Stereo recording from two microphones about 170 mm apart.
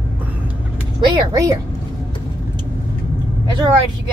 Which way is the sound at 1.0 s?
25° right (ahead or behind).